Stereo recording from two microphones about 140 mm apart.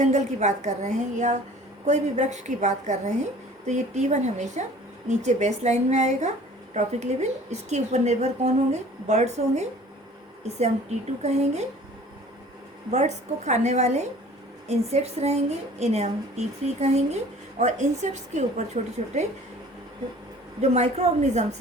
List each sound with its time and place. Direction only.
0.0 s a woman's voice: 55° right (ahead or behind)
12.9 s a woman's voice: 55° right (ahead or behind)
20.6 s a woman's voice: 50° right (ahead or behind)